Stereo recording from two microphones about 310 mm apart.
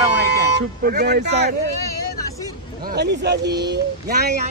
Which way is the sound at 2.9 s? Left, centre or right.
Right.